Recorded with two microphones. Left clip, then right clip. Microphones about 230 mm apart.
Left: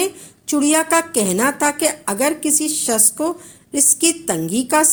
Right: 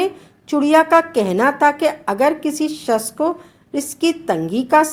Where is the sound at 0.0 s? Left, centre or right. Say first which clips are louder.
Right 2 dB; left.